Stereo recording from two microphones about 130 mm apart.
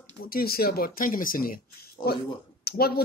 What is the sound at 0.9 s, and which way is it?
Speech, 90° left.